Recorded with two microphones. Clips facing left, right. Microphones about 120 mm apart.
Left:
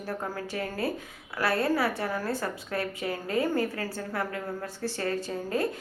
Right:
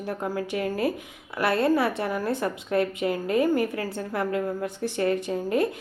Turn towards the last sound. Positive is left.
turn(degrees=-20)  # may be behind; listen again after turning